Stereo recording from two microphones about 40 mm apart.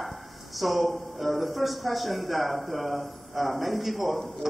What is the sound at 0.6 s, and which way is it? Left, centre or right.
Speech, centre.